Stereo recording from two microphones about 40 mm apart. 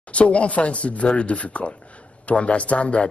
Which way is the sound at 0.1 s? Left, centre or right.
Left.